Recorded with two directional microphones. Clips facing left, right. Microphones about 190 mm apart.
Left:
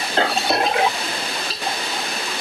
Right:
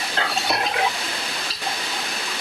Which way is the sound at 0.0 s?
25° left (ahead or behind).